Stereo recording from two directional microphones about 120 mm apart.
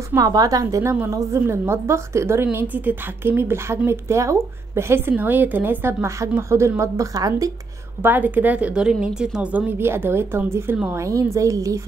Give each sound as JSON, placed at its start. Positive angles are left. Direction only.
{"t": 0.1, "sound": "a woman's voice", "side_deg": -30}
{"t": 8.0, "sound": "a woman's voice", "side_deg": -15}